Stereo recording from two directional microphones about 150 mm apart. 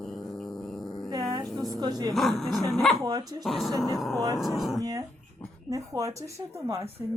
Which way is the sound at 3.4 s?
Centre (ahead or behind).